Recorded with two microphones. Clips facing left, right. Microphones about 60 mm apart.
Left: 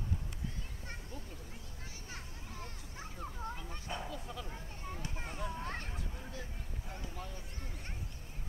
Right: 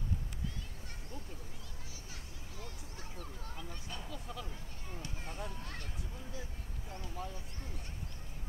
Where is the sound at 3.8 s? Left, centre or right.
Left.